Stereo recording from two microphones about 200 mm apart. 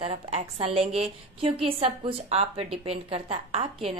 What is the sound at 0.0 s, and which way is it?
A woman's voice, 30° right (ahead or behind).